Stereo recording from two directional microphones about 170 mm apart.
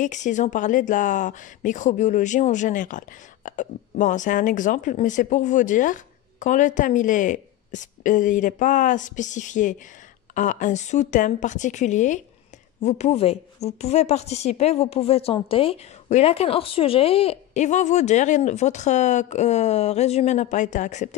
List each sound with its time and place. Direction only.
0.0 s a woman's voice: 45° left (ahead or behind)